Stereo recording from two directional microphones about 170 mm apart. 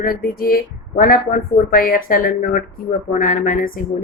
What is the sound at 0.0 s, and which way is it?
A woman's voice, 60° left (ahead or behind).